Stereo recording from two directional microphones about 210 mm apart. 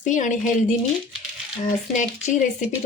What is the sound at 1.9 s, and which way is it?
Speech, 35° left (ahead or behind).